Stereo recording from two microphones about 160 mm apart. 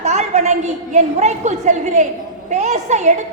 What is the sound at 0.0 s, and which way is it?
A woman's voice, 45° right (ahead or behind).